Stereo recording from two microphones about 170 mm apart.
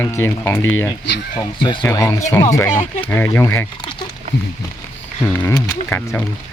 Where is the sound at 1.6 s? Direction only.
30° left (ahead or behind).